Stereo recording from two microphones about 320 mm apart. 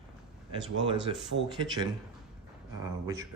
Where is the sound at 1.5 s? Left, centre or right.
Centre.